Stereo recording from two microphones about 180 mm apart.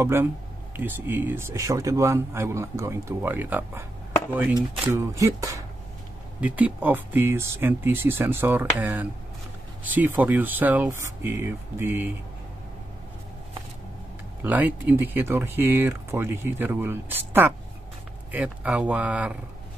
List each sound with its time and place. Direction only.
0.0 s speech: 15° right (ahead or behind)
14.4 s speech: 10° right (ahead or behind)